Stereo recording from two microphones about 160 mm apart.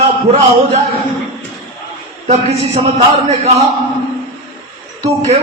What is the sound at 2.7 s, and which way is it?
Speech, 40° right (ahead or behind).